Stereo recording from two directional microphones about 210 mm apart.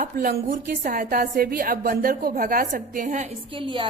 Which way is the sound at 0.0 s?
40° right (ahead or behind).